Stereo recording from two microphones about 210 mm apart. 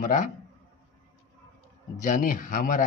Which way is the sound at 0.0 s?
35° left (ahead or behind).